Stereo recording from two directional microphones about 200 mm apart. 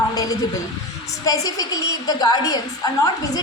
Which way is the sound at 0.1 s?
20° left (ahead or behind).